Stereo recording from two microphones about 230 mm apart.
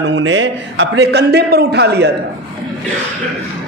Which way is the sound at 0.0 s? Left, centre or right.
Right.